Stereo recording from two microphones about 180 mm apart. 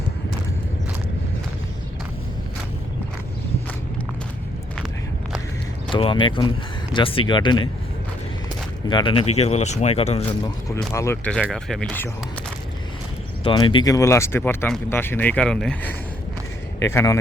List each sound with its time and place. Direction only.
5.9 s speech: 25° left (ahead or behind)
8.9 s speech: 25° left (ahead or behind)
10.9 s speech: 15° left (ahead or behind)
11.3 s speech: centre (ahead or behind)
13.4 s speech: 25° left (ahead or behind)